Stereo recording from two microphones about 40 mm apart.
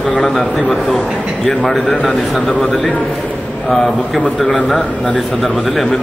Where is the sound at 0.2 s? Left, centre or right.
Centre.